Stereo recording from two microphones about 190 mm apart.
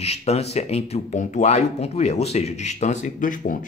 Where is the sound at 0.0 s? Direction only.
35° left (ahead or behind).